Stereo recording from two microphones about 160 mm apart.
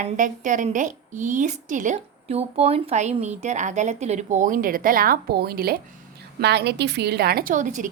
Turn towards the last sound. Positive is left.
turn(degrees=-50)  # may be behind; listen again after turning